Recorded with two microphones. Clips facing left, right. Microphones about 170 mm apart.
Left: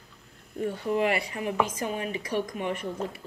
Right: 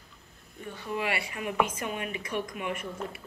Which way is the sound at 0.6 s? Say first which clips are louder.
Left 7 dB; 35° left (ahead or behind).